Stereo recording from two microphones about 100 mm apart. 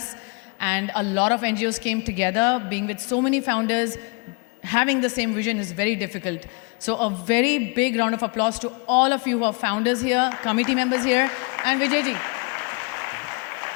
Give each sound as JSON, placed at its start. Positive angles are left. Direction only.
{"t": 0.6, "sound": "a woman's voice", "side_deg": 20}